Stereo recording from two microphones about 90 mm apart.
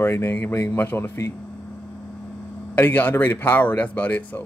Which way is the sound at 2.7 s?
20° left (ahead or behind).